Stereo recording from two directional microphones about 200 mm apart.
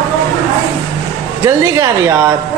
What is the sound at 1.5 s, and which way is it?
Speech, 15° right (ahead or behind).